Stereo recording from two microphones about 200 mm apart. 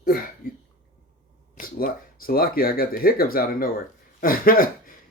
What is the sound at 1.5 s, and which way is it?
Speech, 45° left (ahead or behind).